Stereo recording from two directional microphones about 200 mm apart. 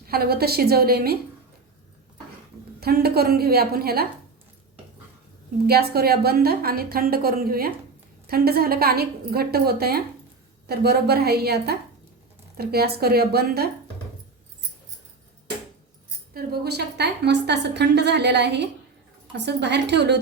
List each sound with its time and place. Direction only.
0.0 s a woman's voice: 50° right (ahead or behind)
2.8 s a woman's voice: 50° right (ahead or behind)
5.6 s a woman's voice: 50° right (ahead or behind)
16.3 s a woman's voice: 50° right (ahead or behind)